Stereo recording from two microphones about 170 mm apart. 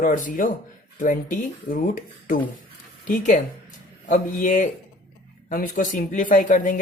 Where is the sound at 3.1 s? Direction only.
50° left (ahead or behind).